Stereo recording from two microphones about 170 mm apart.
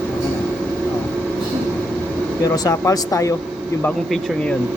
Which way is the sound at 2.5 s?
20° left (ahead or behind).